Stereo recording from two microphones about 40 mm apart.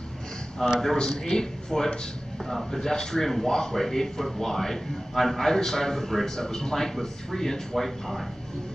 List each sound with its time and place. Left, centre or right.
0.6 s speech: centre
0.9 s a man's voice: left; by 8.3 s centre